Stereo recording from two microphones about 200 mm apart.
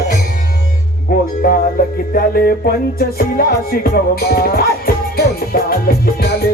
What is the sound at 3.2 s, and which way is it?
Music, 50° left (ahead or behind).